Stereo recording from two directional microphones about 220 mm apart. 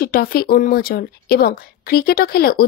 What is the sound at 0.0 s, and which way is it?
A woman's voice, 40° left (ahead or behind).